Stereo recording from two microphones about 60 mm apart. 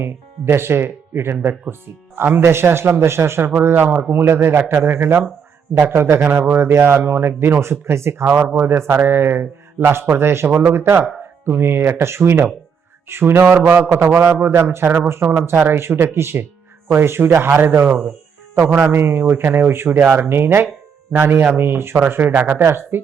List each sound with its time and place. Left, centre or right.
0.0 s speech: right
2.4 s speech: right
3.6 s speech: right
4.1 s speech: right